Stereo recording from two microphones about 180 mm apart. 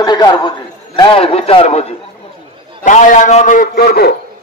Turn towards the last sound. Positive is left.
turn(degrees=60)  # may be behind; listen again after turning